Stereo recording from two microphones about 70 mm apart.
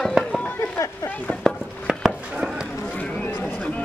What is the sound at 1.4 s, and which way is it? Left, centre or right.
Chopping, centre.